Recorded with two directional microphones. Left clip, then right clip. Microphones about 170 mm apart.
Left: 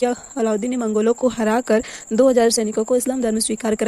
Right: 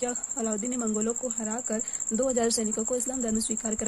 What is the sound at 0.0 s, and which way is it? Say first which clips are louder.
Speech: left 11 dB; 40° left (ahead or behind).